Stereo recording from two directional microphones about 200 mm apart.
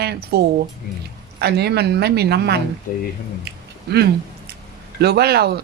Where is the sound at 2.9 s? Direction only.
40° left (ahead or behind).